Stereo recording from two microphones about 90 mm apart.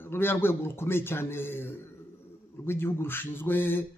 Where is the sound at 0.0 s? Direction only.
25° left (ahead or behind).